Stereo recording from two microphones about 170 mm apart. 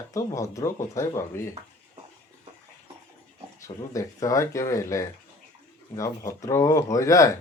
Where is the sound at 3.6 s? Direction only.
20° left (ahead or behind).